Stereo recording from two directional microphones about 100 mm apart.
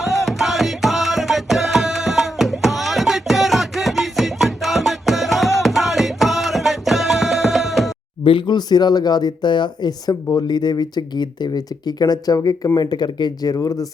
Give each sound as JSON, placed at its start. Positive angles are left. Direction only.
{"t": 0.0, "sound": "music", "side_deg": 0}
{"t": 8.2, "sound": "speech", "side_deg": 55}